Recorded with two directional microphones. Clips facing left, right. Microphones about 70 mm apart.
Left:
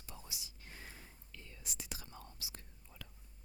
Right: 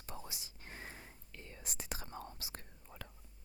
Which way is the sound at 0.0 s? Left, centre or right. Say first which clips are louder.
Right 4 dB; right.